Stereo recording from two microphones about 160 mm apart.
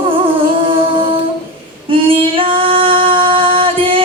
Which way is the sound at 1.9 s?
35° right (ahead or behind).